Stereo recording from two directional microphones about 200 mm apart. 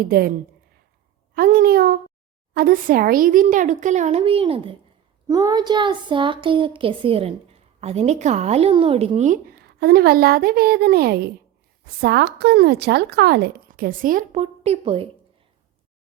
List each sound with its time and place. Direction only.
0.0 s speech: 50° right (ahead or behind)
1.4 s a sound: 50° right (ahead or behind)
2.5 s a child's voice: 45° right (ahead or behind)
9.6 s speech: 55° right (ahead or behind); by 15.0 s 30° right (ahead or behind)